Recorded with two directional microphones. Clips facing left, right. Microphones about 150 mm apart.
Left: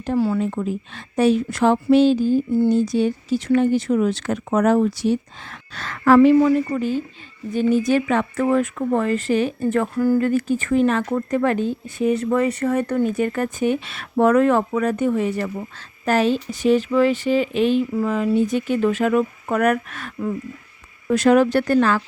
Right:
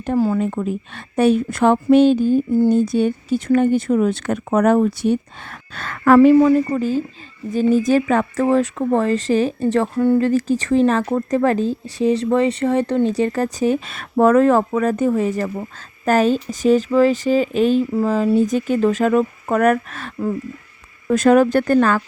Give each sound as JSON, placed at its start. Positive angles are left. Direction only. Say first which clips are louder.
{"t": 0.0, "sound": "a woman's voice", "louder": "right 2 dB", "side_deg": -50}
{"t": 6.1, "sound": "speech", "louder": "right 3 dB", "side_deg": -35}
{"t": 21.1, "sound": "speech", "louder": "right 2 dB", "side_deg": -45}